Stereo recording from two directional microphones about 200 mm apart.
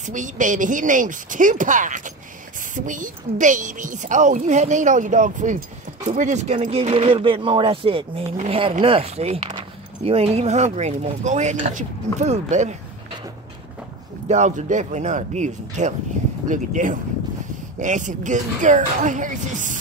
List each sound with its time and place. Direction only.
0.0 s a woman's voice: 40° right (ahead or behind)
14.2 s a woman's voice: 35° right (ahead or behind)